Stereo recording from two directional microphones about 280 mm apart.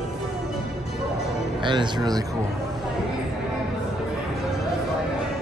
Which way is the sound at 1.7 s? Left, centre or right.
Centre.